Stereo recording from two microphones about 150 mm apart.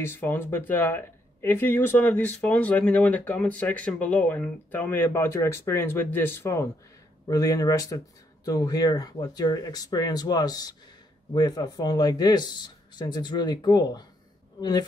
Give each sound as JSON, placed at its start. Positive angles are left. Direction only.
{"t": 0.0, "sound": "speech", "side_deg": 15}